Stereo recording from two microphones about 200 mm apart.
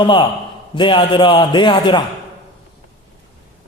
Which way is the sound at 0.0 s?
25° left (ahead or behind).